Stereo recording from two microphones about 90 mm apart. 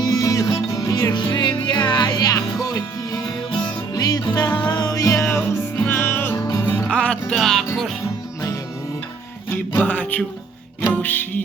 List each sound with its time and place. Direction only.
0.0 s music: 40° left (ahead or behind)
5.1 s music: 30° left (ahead or behind)
6.9 s music: 10° left (ahead or behind)
9.5 s music: 15° left (ahead or behind)